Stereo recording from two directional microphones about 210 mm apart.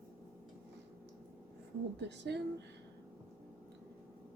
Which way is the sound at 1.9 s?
55° right (ahead or behind).